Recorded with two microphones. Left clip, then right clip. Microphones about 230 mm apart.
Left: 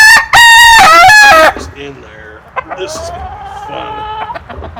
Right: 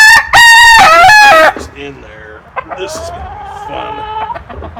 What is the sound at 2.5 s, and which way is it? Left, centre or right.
Chicken, left.